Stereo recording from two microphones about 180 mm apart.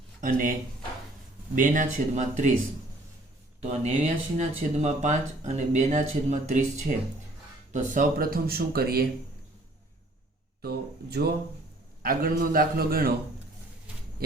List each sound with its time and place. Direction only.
0.2 s a man's voice: 50° right (ahead or behind)
1.5 s a man's voice: 45° right (ahead or behind)
3.7 s speech: 40° right (ahead or behind); by 9.0 s 60° right (ahead or behind)
10.6 s a man's voice: 60° right (ahead or behind)